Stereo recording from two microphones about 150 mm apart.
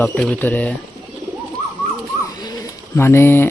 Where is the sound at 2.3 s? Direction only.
25° left (ahead or behind).